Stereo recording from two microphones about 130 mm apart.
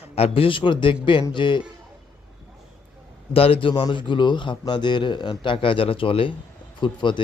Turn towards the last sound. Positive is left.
turn(degrees=35)  # may be behind; listen again after turning